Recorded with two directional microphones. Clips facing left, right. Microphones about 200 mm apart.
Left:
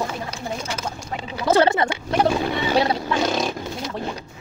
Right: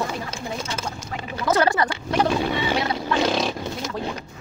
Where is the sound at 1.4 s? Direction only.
25° left (ahead or behind).